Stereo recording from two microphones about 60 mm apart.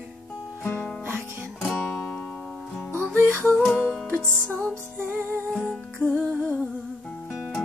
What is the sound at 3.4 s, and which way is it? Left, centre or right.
Music, left.